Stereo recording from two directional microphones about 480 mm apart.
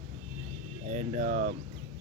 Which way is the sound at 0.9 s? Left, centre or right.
Centre.